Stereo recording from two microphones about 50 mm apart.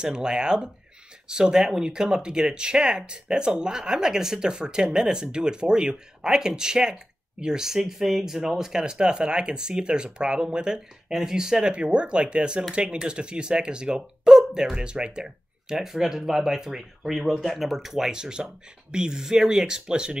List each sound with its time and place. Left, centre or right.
0.0 s speech: centre
15.8 s speech: centre